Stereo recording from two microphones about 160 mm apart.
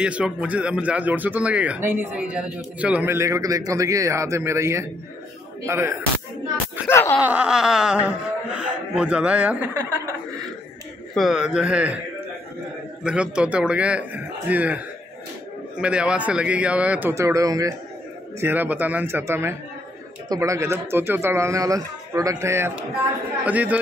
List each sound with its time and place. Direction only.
0.0 s speech: 5° right (ahead or behind)
6.9 s laughter: 15° left (ahead or behind)
7.2 s speech: 5° right (ahead or behind)
11.1 s a man's voice: 5° right (ahead or behind)
13.0 s speech: 5° right (ahead or behind)
15.8 s speech: 5° right (ahead or behind)